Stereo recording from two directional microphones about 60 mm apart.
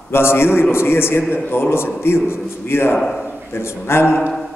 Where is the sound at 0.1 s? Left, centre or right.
Left.